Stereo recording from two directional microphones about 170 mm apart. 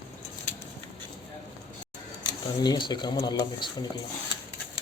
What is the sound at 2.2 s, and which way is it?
Speech, 25° left (ahead or behind).